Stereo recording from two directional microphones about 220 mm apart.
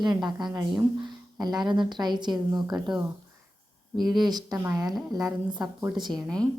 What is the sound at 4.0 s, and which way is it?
A woman's voice, 20° right (ahead or behind).